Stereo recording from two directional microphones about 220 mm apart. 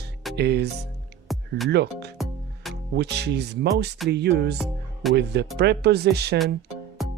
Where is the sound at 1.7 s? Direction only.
50° right (ahead or behind).